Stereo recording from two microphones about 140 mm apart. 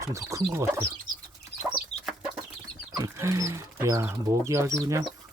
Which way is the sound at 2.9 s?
20° right (ahead or behind).